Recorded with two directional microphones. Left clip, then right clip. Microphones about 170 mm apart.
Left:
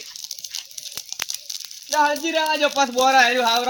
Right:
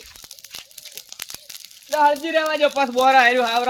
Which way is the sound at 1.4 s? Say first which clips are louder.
Left 6 dB; 40° right (ahead or behind).